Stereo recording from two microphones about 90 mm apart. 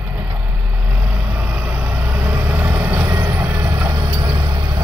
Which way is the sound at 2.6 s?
20° right (ahead or behind).